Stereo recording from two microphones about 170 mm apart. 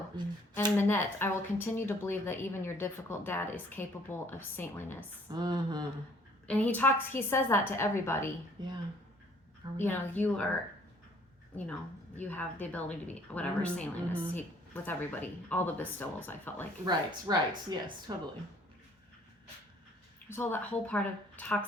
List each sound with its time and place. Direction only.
0.5 s speech: 15° left (ahead or behind)
5.3 s speech: 25° right (ahead or behind)
6.5 s speech: 10° left (ahead or behind)
8.6 s speech: 25° right (ahead or behind)
9.7 s speech: 10° left (ahead or behind)
12.1 s speech: 10° left (ahead or behind)
16.8 s speech: 25° right (ahead or behind)
20.3 s speech: 10° left (ahead or behind)